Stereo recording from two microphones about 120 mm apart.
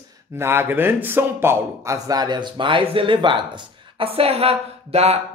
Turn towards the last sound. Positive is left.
turn(degrees=-60)  # may be behind; listen again after turning